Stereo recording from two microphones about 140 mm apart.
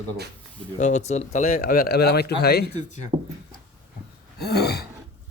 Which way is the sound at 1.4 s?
90° left.